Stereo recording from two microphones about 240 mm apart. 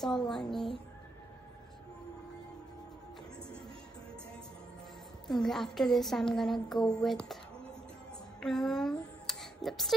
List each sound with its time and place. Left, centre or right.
0.3 s a woman's voice: centre
5.3 s a woman's voice: centre
8.4 s a sound: centre